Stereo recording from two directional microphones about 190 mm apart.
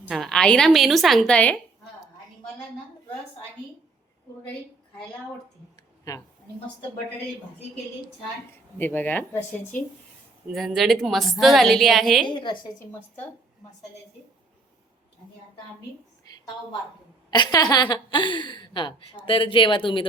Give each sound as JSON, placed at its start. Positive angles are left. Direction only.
{"t": 0.1, "sound": "a woman's voice", "side_deg": 0}
{"t": 6.1, "sound": "a woman's voice", "side_deg": 20}
{"t": 8.8, "sound": "a woman's voice", "side_deg": 10}
{"t": 12.2, "sound": "a woman's voice", "side_deg": 25}
{"t": 16.3, "sound": "a sound", "side_deg": 20}
{"t": 17.3, "sound": "a woman's voice", "side_deg": 20}